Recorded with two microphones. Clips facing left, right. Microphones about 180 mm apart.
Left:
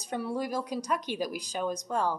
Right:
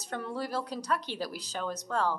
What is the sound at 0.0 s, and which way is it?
Speech, 15° left (ahead or behind).